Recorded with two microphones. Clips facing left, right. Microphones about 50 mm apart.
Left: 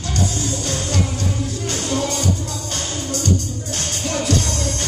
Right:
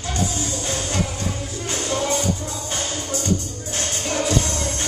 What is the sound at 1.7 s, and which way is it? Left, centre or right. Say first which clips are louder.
Music: right 1 dB; right.